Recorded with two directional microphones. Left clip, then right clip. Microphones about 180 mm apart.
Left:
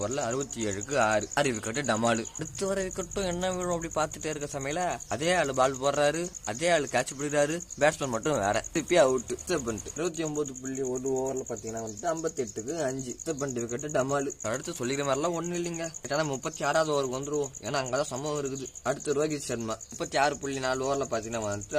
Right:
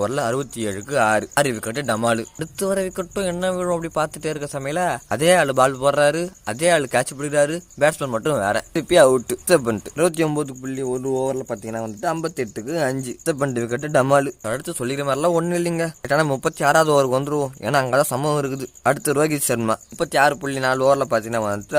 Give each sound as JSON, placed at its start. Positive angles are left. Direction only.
{"t": 0.0, "sound": "a man's voice", "side_deg": -50}
{"t": 9.1, "sound": "speech", "side_deg": -55}
{"t": 11.2, "sound": "speech", "side_deg": -75}
{"t": 14.4, "sound": "speech", "side_deg": -30}
{"t": 15.2, "sound": "a man's voice", "side_deg": -50}